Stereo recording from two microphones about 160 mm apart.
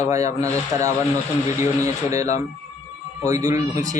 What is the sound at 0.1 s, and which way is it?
Speech, 20° right (ahead or behind).